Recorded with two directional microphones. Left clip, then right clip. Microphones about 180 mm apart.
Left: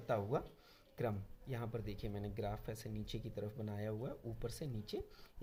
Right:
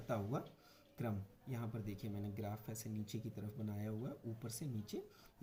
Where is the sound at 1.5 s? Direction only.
40° left (ahead or behind).